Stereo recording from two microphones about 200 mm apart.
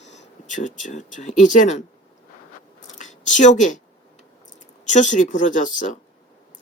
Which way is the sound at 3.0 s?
40° left (ahead or behind).